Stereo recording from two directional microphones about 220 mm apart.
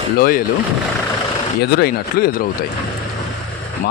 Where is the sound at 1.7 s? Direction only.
45° left (ahead or behind).